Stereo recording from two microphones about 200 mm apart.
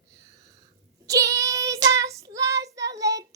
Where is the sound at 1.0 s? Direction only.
15° right (ahead or behind).